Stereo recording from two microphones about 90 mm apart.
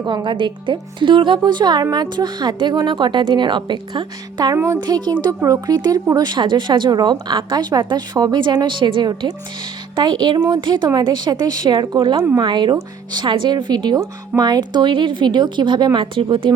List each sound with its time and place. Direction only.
0.0 s a woman's voice: 55° right (ahead or behind)
4.5 s speech: 35° right (ahead or behind)
4.8 s speech: 55° right (ahead or behind)
6.2 s a woman's voice: 60° right (ahead or behind)